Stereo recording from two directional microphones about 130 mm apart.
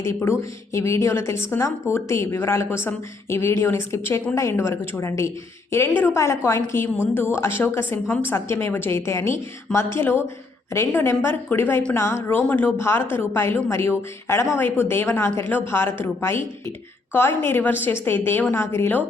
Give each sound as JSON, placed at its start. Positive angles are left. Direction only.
{"t": 0.0, "sound": "a woman's voice", "side_deg": 20}